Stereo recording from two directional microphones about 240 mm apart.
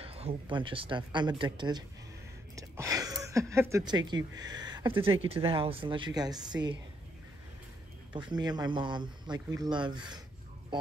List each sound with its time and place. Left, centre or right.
0.0 s speech: right
8.1 s speech: centre